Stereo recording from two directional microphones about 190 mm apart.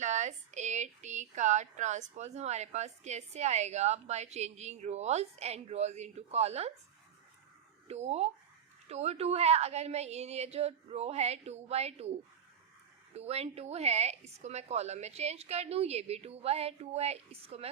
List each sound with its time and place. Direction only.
0.0 s speech: 40° right (ahead or behind)
7.9 s speech: 35° right (ahead or behind)
13.1 s speech: 35° right (ahead or behind)